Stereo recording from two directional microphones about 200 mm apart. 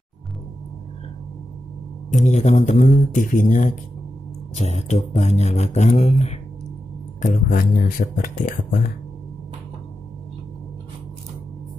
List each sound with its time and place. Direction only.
2.2 s speech: 35° left (ahead or behind)